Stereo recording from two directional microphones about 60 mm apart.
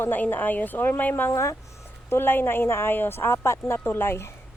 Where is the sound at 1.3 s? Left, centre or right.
Left.